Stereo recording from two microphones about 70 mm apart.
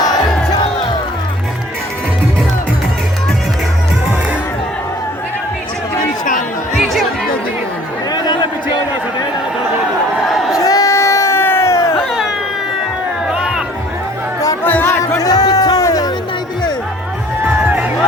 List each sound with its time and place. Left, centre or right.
6.7 s chatter: centre
8.1 s a sound: left
10.2 s a sound: centre
10.6 s crowd: left
10.9 s a sound: left
11.9 s cat: centre
13.2 s music: centre
14.6 s music: left
14.8 s music: left
17.7 s music: right